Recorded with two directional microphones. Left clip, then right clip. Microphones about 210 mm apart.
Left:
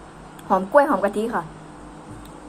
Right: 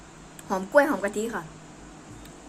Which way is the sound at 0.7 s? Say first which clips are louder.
Left 3 dB; 15° right (ahead or behind).